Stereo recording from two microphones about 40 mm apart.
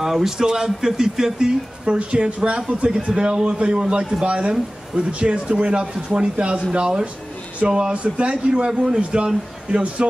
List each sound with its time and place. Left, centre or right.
0.0 s speech: centre